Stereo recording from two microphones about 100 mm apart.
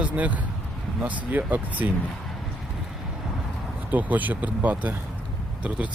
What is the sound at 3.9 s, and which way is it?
Speech, 15° right (ahead or behind).